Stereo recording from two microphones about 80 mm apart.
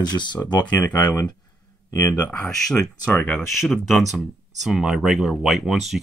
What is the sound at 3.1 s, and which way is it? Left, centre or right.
Speech, left.